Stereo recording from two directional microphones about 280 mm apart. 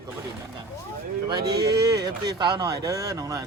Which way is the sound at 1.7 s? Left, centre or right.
Centre.